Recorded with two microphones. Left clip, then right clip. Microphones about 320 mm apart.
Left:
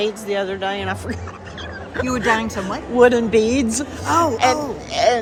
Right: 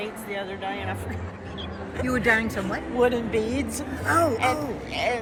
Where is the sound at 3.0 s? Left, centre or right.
Left.